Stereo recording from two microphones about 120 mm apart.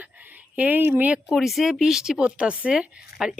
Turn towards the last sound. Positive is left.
turn(degrees=-10)  # may be behind; listen again after turning